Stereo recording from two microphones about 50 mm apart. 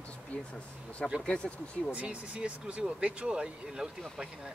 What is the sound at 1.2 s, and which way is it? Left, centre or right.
Speech, centre.